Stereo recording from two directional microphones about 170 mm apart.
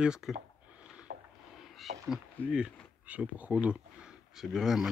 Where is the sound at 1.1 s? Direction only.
70° right (ahead or behind).